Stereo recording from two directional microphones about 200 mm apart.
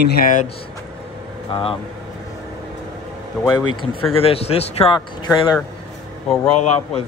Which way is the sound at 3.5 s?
25° left (ahead or behind).